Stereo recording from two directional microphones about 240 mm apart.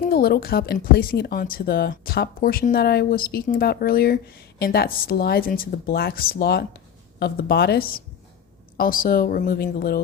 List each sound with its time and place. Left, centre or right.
0.0 s a woman's voice: left